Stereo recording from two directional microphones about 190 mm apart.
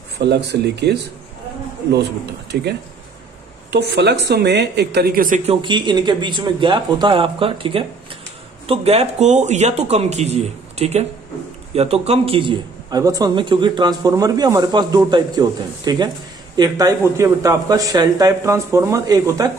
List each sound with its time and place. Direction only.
0.2 s a woman's voice: 60° right (ahead or behind)
2.5 s a woman's voice: 55° right (ahead or behind)
3.7 s a woman's voice: 60° right (ahead or behind)
5.5 s a man's voice: 25° right (ahead or behind)